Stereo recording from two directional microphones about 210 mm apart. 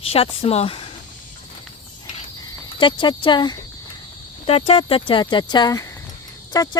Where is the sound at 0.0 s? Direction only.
25° left (ahead or behind).